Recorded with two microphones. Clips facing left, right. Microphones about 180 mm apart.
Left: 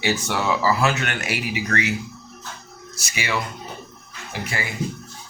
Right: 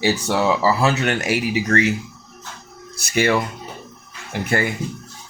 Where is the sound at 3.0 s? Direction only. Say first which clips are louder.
Right 9 dB; 55° right (ahead or behind).